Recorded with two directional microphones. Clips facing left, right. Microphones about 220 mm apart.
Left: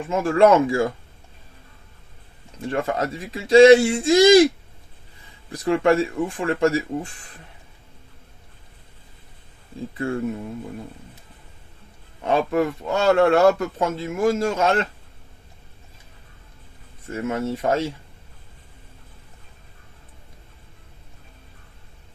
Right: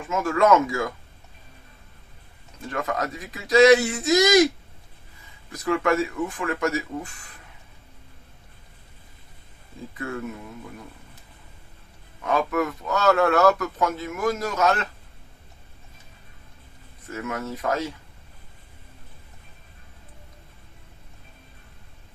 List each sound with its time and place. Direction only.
0.1 s speech: 30° left (ahead or behind)
2.6 s a man's voice: 30° left (ahead or behind)
5.5 s speech: 30° left (ahead or behind)
10.0 s speech: 30° left (ahead or behind)
12.2 s a man's voice: 30° left (ahead or behind)
17.1 s a man's voice: 30° left (ahead or behind)